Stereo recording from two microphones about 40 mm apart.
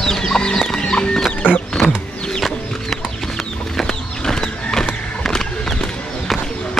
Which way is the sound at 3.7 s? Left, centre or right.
Centre.